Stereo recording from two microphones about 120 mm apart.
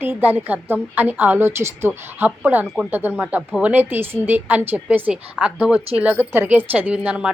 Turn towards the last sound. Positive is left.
turn(degrees=-10)  # may be behind; listen again after turning